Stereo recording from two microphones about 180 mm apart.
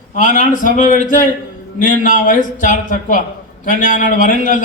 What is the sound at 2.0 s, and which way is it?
A man's voice, 45° left (ahead or behind).